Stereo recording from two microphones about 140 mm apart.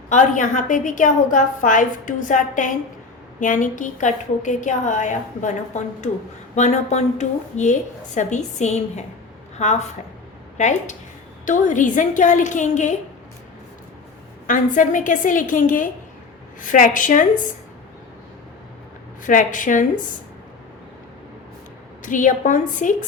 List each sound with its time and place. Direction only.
0.1 s a woman's voice: 60° left (ahead or behind)
14.4 s a woman's voice: 70° left (ahead or behind)
19.2 s a woman's voice: 70° left (ahead or behind)
22.0 s a woman's voice: 65° left (ahead or behind)